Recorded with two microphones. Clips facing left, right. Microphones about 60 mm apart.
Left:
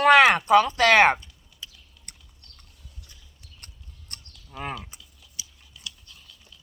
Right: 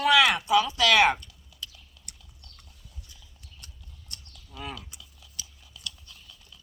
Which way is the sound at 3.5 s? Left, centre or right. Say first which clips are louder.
Left 2 dB; left.